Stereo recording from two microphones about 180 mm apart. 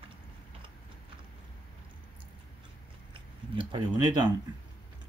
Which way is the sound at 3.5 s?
25° right (ahead or behind).